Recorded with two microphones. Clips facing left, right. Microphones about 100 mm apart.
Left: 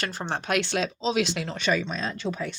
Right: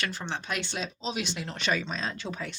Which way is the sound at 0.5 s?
85° left.